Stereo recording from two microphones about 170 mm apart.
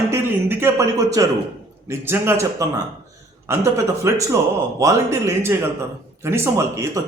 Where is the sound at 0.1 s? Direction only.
15° right (ahead or behind).